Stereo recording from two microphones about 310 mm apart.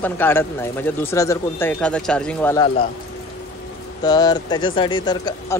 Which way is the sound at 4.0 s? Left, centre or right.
Centre.